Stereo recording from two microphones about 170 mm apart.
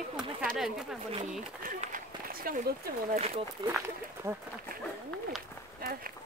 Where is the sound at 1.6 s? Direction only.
55° right (ahead or behind).